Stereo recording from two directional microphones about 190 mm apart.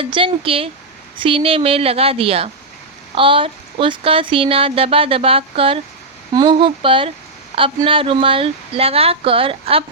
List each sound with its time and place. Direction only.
0.0 s speech: 30° right (ahead or behind)